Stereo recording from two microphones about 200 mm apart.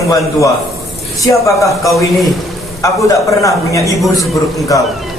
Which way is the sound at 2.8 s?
15° left (ahead or behind).